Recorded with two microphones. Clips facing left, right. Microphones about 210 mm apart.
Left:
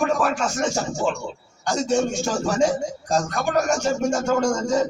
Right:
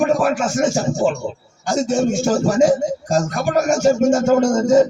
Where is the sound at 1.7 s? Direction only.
45° right (ahead or behind).